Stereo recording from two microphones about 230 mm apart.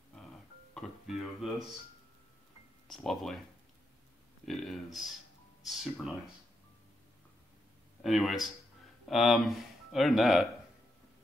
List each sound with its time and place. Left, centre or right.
0.7 s speech: centre
2.9 s speech: centre
4.5 s speech: centre
8.0 s speech: centre